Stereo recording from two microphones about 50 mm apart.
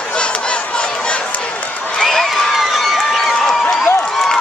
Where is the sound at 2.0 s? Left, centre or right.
Centre.